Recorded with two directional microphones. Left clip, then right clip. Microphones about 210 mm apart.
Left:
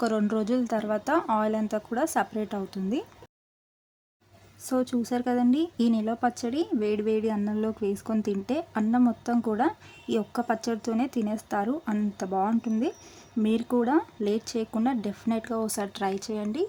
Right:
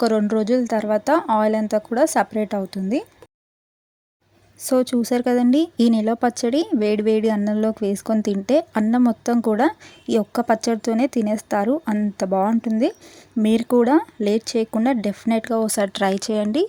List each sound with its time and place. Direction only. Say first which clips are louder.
0.0 s speech: right 8 dB; 25° right (ahead or behind)
4.6 s speech: right 9 dB; 30° right (ahead or behind)